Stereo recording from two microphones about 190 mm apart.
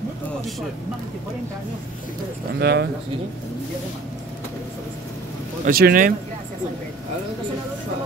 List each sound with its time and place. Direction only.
2.6 s speech: 60° right (ahead or behind)
5.7 s speech: 50° right (ahead or behind)